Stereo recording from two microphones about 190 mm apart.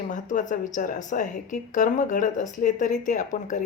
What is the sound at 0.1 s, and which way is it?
A woman's voice, 40° left (ahead or behind).